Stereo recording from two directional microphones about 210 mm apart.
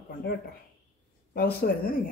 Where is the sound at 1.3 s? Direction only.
45° left (ahead or behind).